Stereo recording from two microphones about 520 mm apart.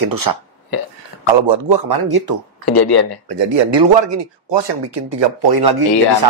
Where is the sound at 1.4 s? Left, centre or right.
Right.